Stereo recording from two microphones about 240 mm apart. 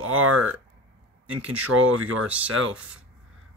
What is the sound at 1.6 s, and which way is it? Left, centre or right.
Speech, right.